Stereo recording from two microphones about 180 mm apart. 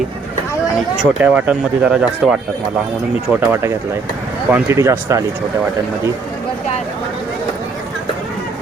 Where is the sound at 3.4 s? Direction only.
15° right (ahead or behind).